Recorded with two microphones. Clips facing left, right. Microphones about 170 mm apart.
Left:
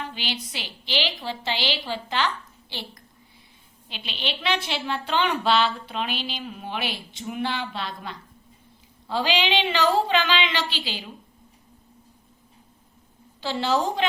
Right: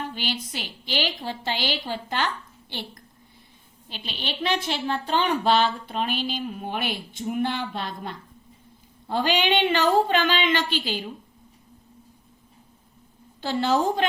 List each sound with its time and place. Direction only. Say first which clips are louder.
0.0 s a woman's voice: right 2 dB; 50° right (ahead or behind)
3.8 s a woman's voice: left 1 dB; 45° right (ahead or behind)
13.4 s a woman's voice: right 2 dB; 45° right (ahead or behind)